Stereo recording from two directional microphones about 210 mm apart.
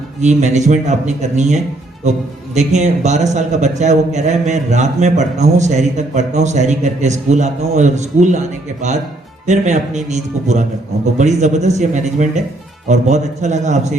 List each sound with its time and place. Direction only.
0.2 s a man's voice: 35° right (ahead or behind)